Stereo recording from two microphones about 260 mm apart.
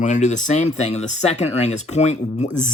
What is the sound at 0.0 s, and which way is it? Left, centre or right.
Speech, left.